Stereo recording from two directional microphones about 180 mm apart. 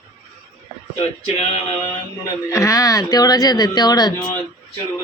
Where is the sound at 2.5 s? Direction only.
15° left (ahead or behind).